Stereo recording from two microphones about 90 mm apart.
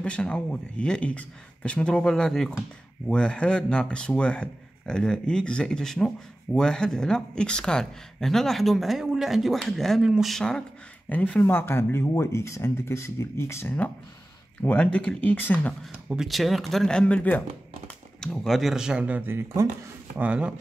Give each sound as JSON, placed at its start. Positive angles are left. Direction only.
{"t": 0.0, "sound": "speech", "side_deg": 10}
{"t": 11.1, "sound": "speech", "side_deg": 15}
{"t": 11.4, "sound": "speech", "side_deg": 25}
{"t": 14.6, "sound": "speech", "side_deg": 15}
{"t": 16.1, "sound": "speech", "side_deg": -5}